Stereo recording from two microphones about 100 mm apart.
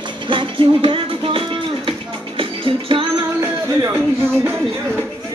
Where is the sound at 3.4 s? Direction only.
25° right (ahead or behind).